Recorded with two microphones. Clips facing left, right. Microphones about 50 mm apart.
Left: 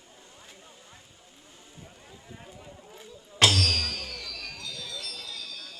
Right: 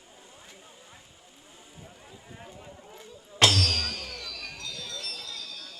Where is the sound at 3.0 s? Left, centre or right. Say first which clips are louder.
Even; centre.